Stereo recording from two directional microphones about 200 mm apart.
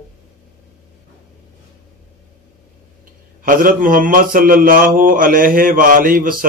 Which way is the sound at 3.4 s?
45° right (ahead or behind).